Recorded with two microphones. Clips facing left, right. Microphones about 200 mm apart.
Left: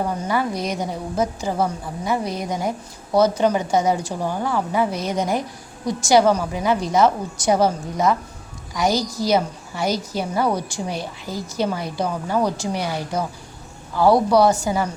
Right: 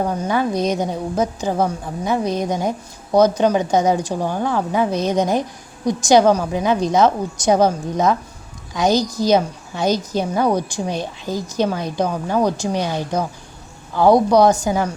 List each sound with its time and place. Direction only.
0.3 s a woman's voice: 20° right (ahead or behind)